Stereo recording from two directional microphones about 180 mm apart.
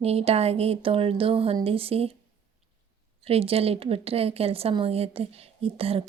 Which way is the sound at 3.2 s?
35° right (ahead or behind).